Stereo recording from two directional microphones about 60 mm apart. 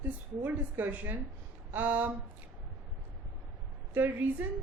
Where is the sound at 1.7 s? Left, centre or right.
Right.